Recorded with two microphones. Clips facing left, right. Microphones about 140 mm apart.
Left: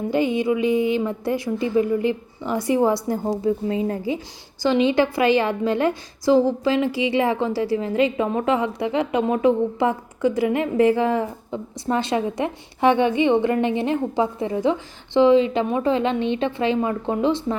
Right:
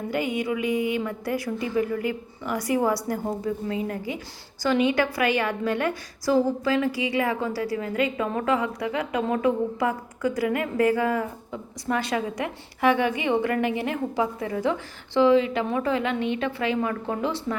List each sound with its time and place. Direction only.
0.1 s a woman's voice: 25° left (ahead or behind)